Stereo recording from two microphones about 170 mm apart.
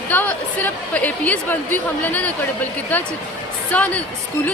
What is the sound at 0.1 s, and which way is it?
A woman's voice, 10° left (ahead or behind).